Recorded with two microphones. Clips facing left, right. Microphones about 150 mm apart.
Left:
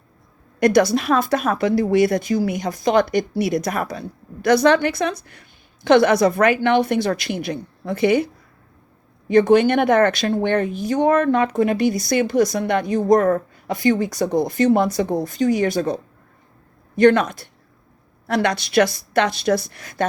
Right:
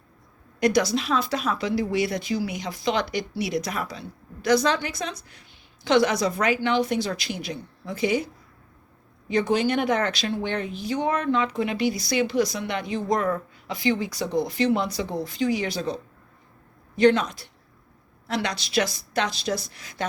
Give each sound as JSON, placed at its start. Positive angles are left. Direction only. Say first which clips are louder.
{"t": 0.6, "sound": "a woman's voice", "louder": "left 6 dB", "side_deg": 55}
{"t": 9.3, "sound": "a woman's voice", "louder": "left 8 dB", "side_deg": 55}